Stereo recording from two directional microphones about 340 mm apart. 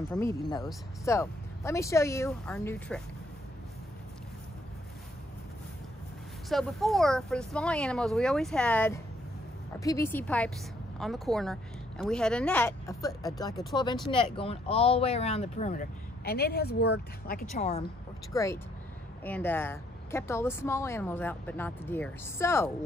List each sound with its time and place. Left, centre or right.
0.1 s speech: centre
6.5 s speech: centre